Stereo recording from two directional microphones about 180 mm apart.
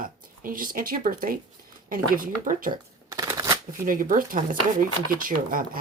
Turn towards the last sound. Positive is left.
turn(degrees=-50)  # may be behind; listen again after turning